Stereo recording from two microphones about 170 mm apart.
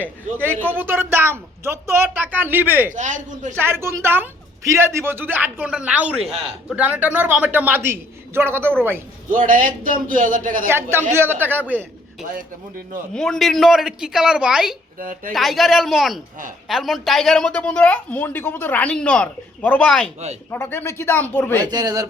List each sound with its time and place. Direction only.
0.3 s a woman's voice: 10° left (ahead or behind)
0.7 s a woman's voice: 10° right (ahead or behind)
2.9 s a man's voice: 45° right (ahead or behind)
3.6 s a woman's voice: 15° right (ahead or behind)
9.3 s a man's voice: 55° right (ahead or behind)
10.7 s a woman's voice: 15° right (ahead or behind)
13.1 s a woman's voice: 5° left (ahead or behind)
14.9 s a woman's voice: 55° right (ahead or behind)
15.3 s a woman's voice: centre (ahead or behind)
21.7 s a man's voice: 25° right (ahead or behind)